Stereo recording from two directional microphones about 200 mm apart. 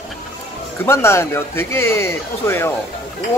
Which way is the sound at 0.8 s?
10° left (ahead or behind).